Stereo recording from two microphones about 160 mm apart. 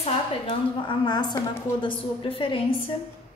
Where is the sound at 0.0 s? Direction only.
35° left (ahead or behind).